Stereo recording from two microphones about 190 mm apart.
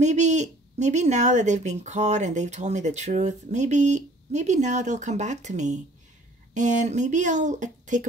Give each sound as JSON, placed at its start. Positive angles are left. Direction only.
{"t": 0.0, "sound": "speech", "side_deg": -40}